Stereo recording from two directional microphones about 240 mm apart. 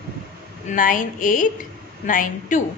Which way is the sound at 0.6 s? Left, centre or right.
Left.